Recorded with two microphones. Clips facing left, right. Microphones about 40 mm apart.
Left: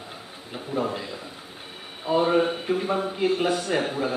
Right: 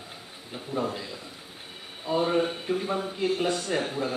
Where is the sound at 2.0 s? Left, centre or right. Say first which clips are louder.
Left 4 dB; centre.